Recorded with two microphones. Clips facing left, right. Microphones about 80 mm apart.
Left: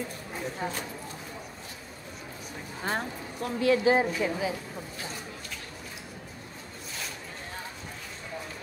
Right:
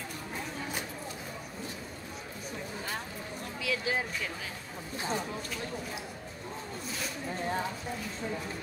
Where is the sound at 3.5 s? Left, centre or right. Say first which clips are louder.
Left 10 dB; left.